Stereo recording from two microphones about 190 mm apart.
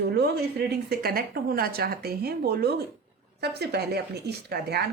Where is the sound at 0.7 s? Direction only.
55° right (ahead or behind).